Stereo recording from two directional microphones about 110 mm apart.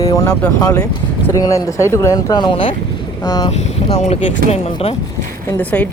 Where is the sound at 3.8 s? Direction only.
80° left.